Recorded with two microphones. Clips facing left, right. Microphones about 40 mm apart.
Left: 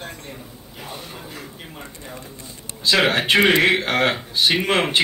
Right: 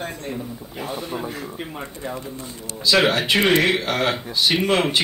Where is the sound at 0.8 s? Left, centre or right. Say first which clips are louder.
Right 7 dB; right.